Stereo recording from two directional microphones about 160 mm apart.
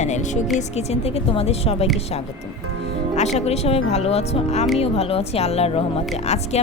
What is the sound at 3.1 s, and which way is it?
A woman's voice, 45° left (ahead or behind).